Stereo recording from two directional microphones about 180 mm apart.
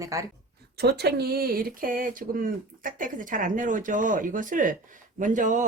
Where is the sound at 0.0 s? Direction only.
15° right (ahead or behind).